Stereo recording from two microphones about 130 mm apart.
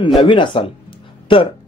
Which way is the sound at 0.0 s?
40° left (ahead or behind).